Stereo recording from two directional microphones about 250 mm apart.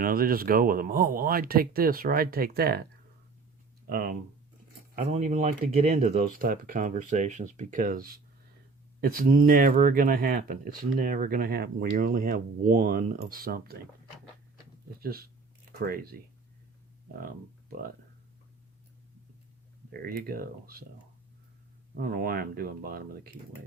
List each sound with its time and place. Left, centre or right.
0.0 s speech: right
3.8 s speech: right
15.8 s speech: right
19.9 s speech: right
21.9 s speech: right